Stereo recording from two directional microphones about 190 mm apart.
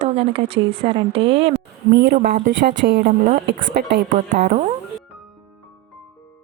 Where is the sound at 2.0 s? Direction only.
50° right (ahead or behind).